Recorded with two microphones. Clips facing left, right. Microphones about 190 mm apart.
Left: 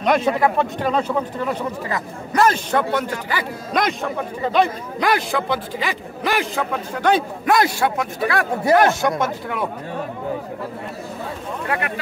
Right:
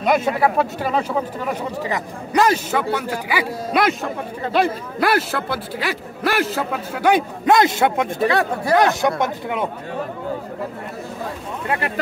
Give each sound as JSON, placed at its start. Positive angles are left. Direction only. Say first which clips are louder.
{"t": 0.0, "sound": "speech", "louder": "even", "side_deg": -5}
{"t": 5.0, "sound": "a man's voice", "louder": "right 1 dB", "side_deg": -5}
{"t": 11.6, "sound": "speech", "louder": "right 1 dB", "side_deg": -25}